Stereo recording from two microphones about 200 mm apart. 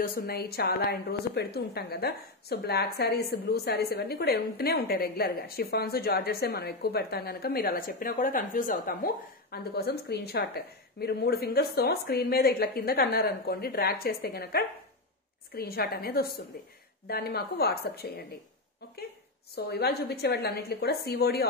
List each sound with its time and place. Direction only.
0.0 s a woman's voice: 50° left (ahead or behind)
19.5 s a woman's voice: 50° left (ahead or behind)